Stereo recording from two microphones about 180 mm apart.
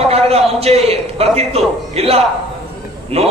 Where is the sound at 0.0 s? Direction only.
35° right (ahead or behind).